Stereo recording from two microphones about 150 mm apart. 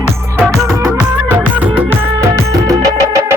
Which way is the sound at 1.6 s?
15° right (ahead or behind).